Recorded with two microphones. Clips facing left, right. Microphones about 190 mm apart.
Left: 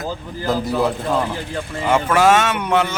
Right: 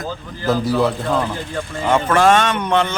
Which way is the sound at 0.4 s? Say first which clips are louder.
Right 3 dB; 20° left (ahead or behind).